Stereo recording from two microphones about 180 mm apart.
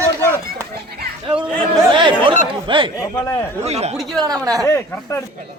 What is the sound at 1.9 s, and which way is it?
Chatter, 30° right (ahead or behind).